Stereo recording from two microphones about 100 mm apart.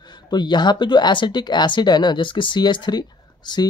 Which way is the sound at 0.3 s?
45° left (ahead or behind).